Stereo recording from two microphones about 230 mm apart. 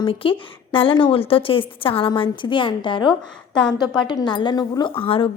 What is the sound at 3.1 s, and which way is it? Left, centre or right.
Speech, centre.